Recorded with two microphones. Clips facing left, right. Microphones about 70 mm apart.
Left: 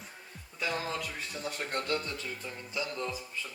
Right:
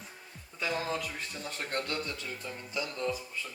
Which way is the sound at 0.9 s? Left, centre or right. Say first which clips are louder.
Right 1 dB; centre.